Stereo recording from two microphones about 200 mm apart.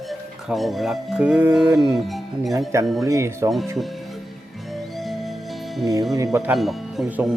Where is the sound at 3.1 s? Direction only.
15° right (ahead or behind).